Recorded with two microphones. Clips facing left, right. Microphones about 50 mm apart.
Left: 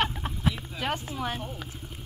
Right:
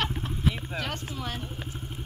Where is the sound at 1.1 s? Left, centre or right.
Centre.